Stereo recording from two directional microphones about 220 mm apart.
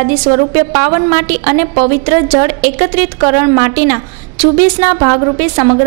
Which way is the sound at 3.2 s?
20° right (ahead or behind).